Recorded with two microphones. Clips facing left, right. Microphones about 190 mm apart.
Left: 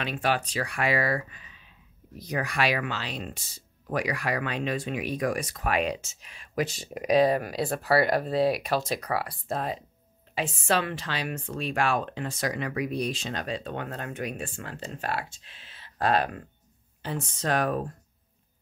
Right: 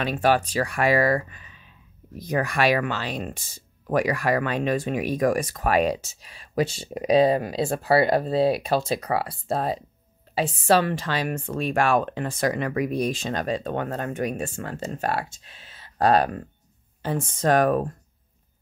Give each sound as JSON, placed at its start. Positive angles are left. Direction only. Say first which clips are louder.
{"t": 0.0, "sound": "speech", "louder": "right 6 dB", "side_deg": -45}